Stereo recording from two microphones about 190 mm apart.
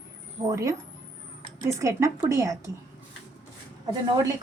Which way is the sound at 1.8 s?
15° right (ahead or behind).